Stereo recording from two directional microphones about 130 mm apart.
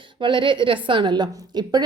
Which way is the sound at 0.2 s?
40° right (ahead or behind).